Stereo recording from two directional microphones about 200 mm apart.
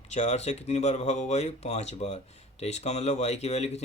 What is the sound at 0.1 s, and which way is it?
Speech, 35° left (ahead or behind).